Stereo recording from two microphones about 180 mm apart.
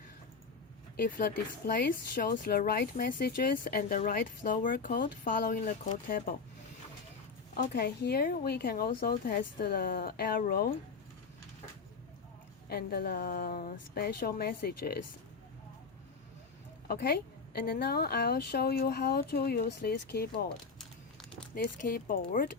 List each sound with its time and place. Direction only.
0.9 s speech: 50° left (ahead or behind)
7.5 s a woman's voice: 60° left (ahead or behind)
12.6 s a woman's voice: 60° left (ahead or behind)
16.9 s a woman's voice: 60° left (ahead or behind)
20.7 s a sound: 5° left (ahead or behind)
21.5 s speech: 55° left (ahead or behind)